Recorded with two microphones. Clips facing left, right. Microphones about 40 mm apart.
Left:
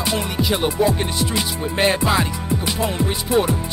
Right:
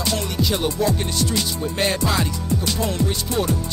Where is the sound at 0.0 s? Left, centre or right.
Centre.